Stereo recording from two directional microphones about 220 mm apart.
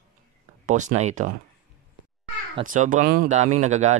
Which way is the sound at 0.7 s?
35° right (ahead or behind).